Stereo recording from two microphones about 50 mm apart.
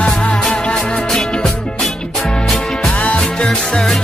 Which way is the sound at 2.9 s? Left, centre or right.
Left.